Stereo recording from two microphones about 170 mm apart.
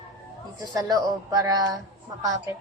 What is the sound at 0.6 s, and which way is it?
A woman's voice, 20° right (ahead or behind).